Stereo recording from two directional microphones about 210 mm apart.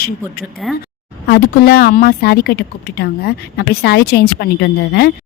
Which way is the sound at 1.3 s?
50° left (ahead or behind).